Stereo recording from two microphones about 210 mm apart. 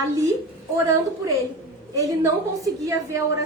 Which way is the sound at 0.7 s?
15° right (ahead or behind).